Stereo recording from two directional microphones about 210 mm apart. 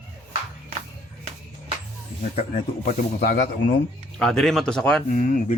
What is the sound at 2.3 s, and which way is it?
Speech, 30° left (ahead or behind).